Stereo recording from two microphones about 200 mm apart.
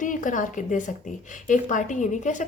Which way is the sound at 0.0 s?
40° left (ahead or behind).